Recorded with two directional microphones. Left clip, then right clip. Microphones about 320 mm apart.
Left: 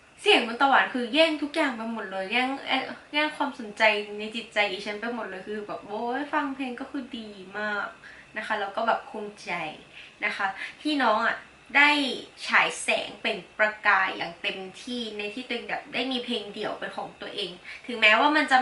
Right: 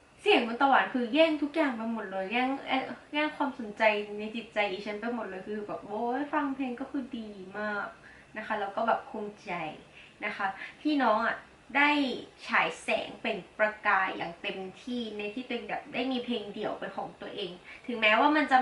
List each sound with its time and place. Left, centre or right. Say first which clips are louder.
0.2 s a woman's voice: left 4 dB; centre
6.1 s a woman's voice: left 3 dB; centre
16.8 s a woman's voice: left 3 dB; centre
17.2 s a woman's voice: left 4 dB; centre